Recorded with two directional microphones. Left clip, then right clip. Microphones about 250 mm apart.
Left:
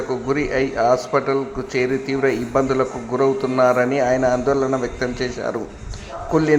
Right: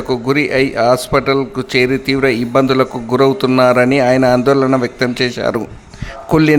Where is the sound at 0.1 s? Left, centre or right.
Right.